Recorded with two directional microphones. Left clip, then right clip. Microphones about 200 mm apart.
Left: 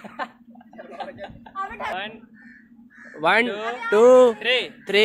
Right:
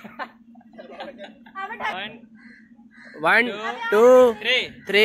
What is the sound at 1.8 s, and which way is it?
Speech, 40° left (ahead or behind).